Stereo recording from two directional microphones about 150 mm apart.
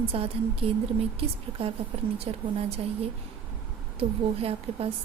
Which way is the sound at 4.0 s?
40° right (ahead or behind).